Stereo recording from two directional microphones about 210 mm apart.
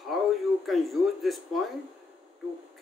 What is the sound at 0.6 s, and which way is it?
Speech, centre (ahead or behind).